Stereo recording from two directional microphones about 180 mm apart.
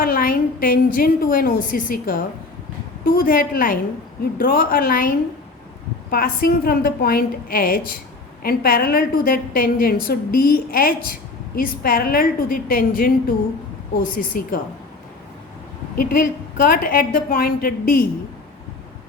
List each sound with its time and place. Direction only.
0.0 s a woman's voice: 50° left (ahead or behind)
16.0 s a woman's voice: 55° left (ahead or behind)